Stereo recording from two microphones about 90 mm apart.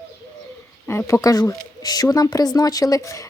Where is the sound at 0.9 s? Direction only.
30° left (ahead or behind).